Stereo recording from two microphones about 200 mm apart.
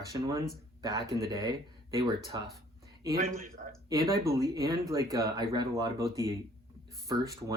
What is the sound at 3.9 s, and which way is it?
Speech, 15° right (ahead or behind).